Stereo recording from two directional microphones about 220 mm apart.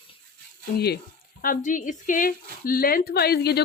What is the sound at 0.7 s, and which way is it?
A woman's voice, 45° left (ahead or behind).